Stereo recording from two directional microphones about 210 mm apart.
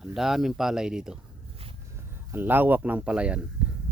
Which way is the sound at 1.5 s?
25° right (ahead or behind).